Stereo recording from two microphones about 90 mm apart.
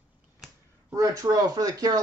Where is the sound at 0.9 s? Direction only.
40° right (ahead or behind).